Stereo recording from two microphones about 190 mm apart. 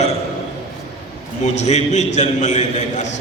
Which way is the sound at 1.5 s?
35° left (ahead or behind).